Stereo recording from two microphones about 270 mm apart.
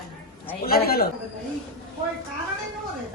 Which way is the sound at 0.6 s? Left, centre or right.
Left.